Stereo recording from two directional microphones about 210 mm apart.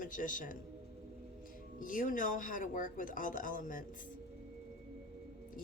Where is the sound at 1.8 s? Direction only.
40° left (ahead or behind).